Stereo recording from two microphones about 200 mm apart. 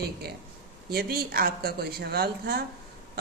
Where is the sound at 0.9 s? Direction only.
50° right (ahead or behind).